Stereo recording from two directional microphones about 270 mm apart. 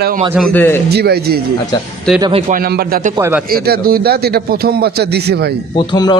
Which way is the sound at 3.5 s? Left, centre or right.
Right.